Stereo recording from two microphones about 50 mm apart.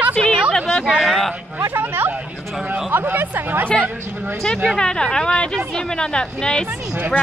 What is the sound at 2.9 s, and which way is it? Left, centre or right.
Speech, right.